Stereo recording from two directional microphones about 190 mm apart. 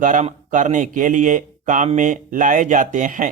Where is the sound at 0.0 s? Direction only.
40° right (ahead or behind).